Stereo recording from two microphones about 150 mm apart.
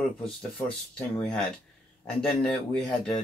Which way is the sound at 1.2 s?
5° left (ahead or behind).